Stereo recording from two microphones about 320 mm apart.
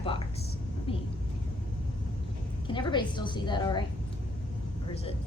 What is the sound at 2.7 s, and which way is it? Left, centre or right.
A woman's voice, centre.